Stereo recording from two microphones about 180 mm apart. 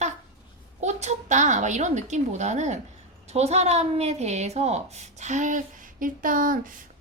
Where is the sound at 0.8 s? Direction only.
40° right (ahead or behind).